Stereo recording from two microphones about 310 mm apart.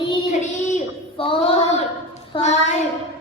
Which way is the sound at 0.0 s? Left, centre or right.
Centre.